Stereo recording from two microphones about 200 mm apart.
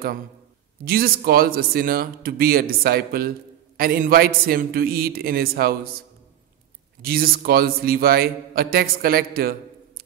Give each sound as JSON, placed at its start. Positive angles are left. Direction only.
{"t": 0.8, "sound": "speech", "side_deg": -50}